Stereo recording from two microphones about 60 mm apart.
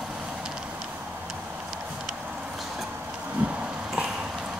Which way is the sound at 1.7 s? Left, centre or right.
Centre.